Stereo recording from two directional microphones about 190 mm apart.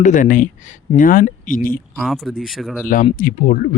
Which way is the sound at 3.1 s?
45° left (ahead or behind).